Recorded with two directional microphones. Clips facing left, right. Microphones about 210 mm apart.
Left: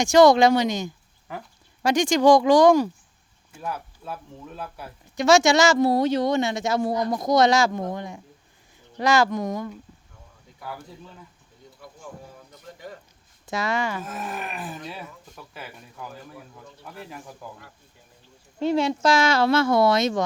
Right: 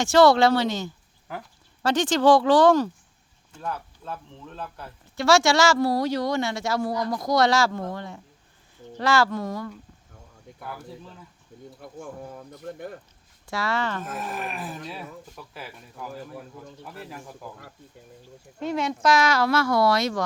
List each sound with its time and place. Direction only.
0.0 s speech: 15° left (ahead or behind)
1.3 s speech: centre (ahead or behind)
1.8 s speech: 10° left (ahead or behind)
11.8 s speech: 50° right (ahead or behind)
13.4 s speech: 20° left (ahead or behind)
14.0 s speech: centre (ahead or behind)
17.4 s speech: centre (ahead or behind)
18.6 s speech: 30° left (ahead or behind)